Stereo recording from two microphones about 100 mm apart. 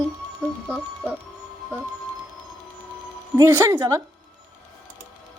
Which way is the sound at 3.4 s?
30° right (ahead or behind).